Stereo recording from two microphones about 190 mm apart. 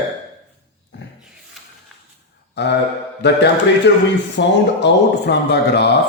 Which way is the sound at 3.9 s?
70° left (ahead or behind).